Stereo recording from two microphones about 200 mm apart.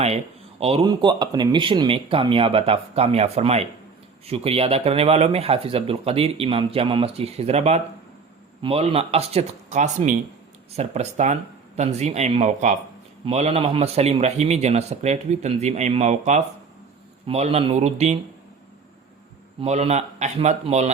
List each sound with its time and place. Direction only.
0.6 s a man's voice: 30° right (ahead or behind)
19.6 s a man's voice: 35° right (ahead or behind)